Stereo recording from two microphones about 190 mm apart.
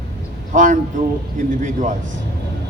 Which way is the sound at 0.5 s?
40° right (ahead or behind).